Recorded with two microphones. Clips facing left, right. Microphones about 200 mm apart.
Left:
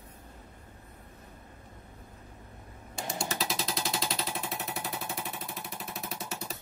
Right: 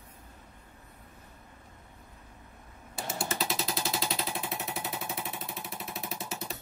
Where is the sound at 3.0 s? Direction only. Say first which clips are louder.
Even; 5° right (ahead or behind).